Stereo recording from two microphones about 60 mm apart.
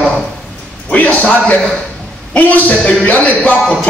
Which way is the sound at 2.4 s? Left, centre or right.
Left.